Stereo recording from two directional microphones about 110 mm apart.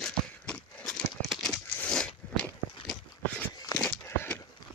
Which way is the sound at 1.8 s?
10° left (ahead or behind).